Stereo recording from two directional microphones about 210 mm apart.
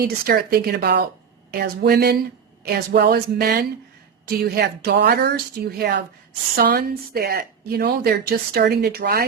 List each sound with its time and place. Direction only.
0.0 s speech: 45° right (ahead or behind)